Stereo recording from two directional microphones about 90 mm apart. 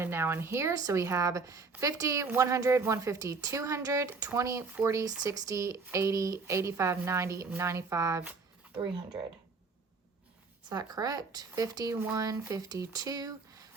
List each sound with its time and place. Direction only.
0.0 s speech: 25° right (ahead or behind)
10.7 s speech: 45° right (ahead or behind)